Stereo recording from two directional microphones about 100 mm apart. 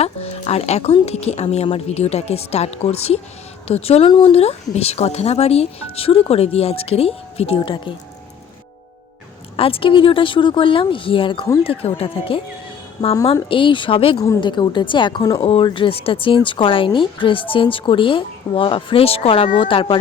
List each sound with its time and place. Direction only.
0.0 s speech: 90° left; by 7.9 s 60° left (ahead or behind)
9.6 s speech: 65° left (ahead or behind)
11.7 s speech: 75° left (ahead or behind)
13.0 s a woman's voice: 35° left (ahead or behind)
13.5 s speech: 55° left (ahead or behind)
14.4 s speech: 50° left (ahead or behind)